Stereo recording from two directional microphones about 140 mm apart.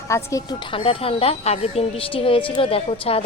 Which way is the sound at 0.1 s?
20° left (ahead or behind).